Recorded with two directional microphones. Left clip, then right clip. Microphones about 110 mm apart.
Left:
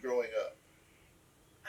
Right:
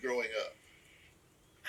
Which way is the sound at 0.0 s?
30° right (ahead or behind).